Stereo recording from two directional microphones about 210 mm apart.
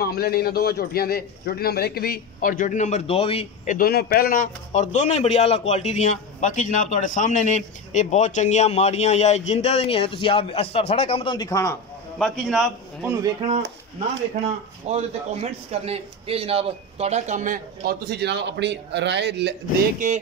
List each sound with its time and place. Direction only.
0.0 s a man's voice: 45° left (ahead or behind); by 3.7 s 25° left (ahead or behind)
3.7 s speech: 45° left (ahead or behind); by 11.7 s 15° left (ahead or behind)
12.2 s a man's voice: centre (ahead or behind)
13.2 s speech: 25° right (ahead or behind); by 19.5 s 55° right (ahead or behind)